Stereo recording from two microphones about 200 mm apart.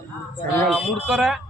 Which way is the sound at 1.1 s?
Centre (ahead or behind).